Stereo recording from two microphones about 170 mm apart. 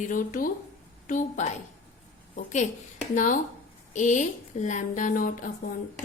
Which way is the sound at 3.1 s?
50° left (ahead or behind).